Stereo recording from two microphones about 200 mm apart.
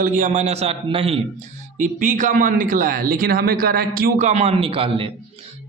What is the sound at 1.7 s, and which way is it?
A man's voice, 40° right (ahead or behind).